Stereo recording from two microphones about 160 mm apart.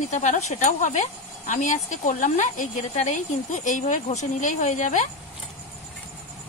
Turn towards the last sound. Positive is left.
turn(degrees=50)  # may be behind; listen again after turning